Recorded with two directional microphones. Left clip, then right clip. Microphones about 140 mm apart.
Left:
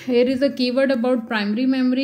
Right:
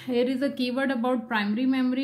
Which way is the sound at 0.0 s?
20° left (ahead or behind).